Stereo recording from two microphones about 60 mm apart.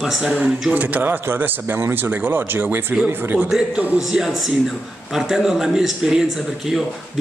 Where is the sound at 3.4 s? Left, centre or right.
Centre.